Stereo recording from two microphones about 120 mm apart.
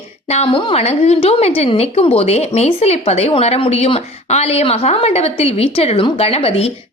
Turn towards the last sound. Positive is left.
turn(degrees=55)  # may be behind; listen again after turning